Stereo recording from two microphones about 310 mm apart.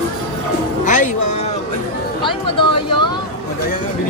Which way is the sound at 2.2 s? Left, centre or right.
Centre.